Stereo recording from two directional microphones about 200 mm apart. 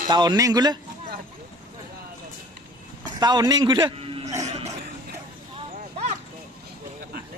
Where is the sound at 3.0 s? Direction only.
20° right (ahead or behind).